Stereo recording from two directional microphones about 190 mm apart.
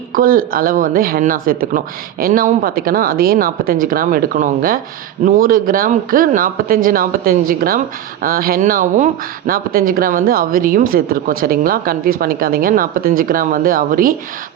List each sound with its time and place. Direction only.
0.1 s speech: 50° right (ahead or behind)